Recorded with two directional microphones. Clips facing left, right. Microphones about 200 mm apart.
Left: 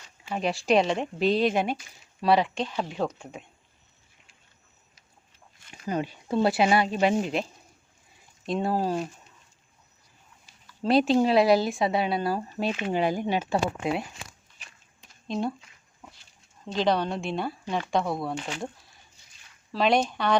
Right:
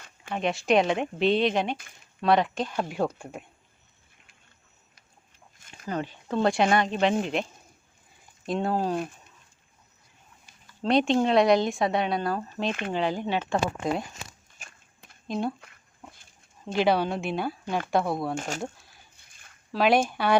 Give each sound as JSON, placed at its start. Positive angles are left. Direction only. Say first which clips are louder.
{"t": 0.3, "sound": "speech", "louder": "even", "side_deg": 0}
{"t": 5.9, "sound": "speech", "louder": "left 2 dB", "side_deg": 15}
{"t": 8.4, "sound": "speech", "louder": "even", "side_deg": 5}
{"t": 10.8, "sound": "speech", "louder": "left 1 dB", "side_deg": 5}
{"t": 14.6, "sound": "walk", "louder": "right 3 dB", "side_deg": -50}
{"t": 15.3, "sound": "speech", "louder": "even", "side_deg": 0}
{"t": 15.6, "sound": "a sound", "louder": "right 2 dB", "side_deg": -55}
{"t": 16.7, "sound": "speech", "louder": "right 1 dB", "side_deg": -5}
{"t": 18.3, "sound": "speech", "louder": "right 2 dB", "side_deg": -45}
{"t": 19.1, "sound": "a sound", "louder": "right 1 dB", "side_deg": -55}
{"t": 19.7, "sound": "speech", "louder": "right 1 dB", "side_deg": -5}